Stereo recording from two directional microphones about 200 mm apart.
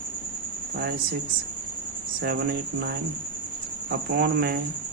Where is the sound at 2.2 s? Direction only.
50° right (ahead or behind).